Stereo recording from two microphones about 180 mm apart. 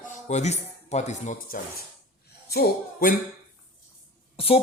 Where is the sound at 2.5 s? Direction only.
55° left (ahead or behind).